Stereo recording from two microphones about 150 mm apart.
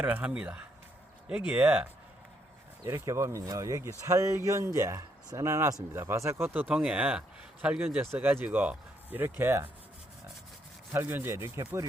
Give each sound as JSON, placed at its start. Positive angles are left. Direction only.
{"t": 0.0, "sound": "speech", "side_deg": -10}
{"t": 10.9, "sound": "speech", "side_deg": -15}